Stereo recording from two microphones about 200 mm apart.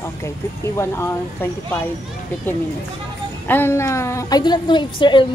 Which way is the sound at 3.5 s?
10° left (ahead or behind).